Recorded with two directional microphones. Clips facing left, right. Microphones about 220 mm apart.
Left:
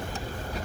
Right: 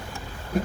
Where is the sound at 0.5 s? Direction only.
50° right (ahead or behind).